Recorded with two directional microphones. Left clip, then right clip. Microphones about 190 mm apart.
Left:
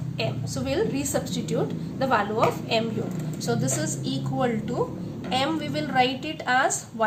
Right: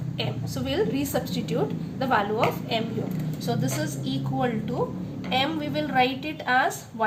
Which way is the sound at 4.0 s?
25° left (ahead or behind).